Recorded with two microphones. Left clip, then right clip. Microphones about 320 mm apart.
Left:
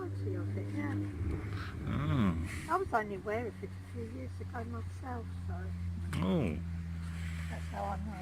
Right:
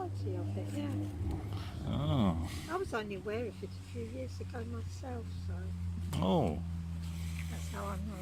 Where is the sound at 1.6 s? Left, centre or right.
Centre.